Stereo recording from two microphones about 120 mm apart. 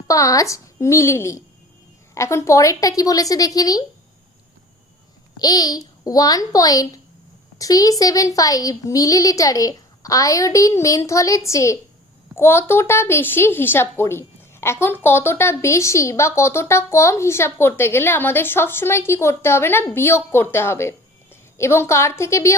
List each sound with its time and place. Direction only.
0.1 s speech: 30° left (ahead or behind)
5.4 s a child's voice: 35° left (ahead or behind)